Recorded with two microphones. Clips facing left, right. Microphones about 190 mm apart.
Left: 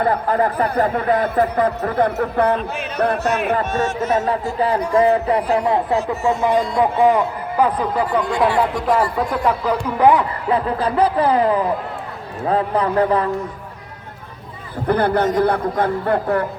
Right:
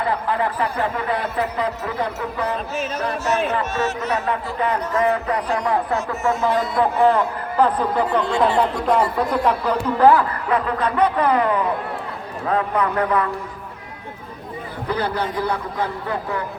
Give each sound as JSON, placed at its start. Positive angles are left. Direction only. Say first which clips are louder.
{"t": 0.0, "sound": "a man's voice", "louder": "left 4 dB", "side_deg": 45}
{"t": 4.4, "sound": "a man's voice", "louder": "left 4 dB", "side_deg": 35}
{"t": 10.0, "sound": "a man's voice", "louder": "even", "side_deg": 15}
{"t": 10.5, "sound": "speech", "louder": "left 3 dB", "side_deg": 30}
{"t": 14.8, "sound": "a man's voice", "louder": "left 7 dB", "side_deg": 55}